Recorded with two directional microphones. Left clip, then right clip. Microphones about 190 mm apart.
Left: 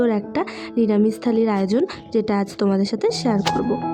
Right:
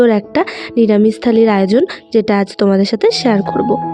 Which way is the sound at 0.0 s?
25° right (ahead or behind).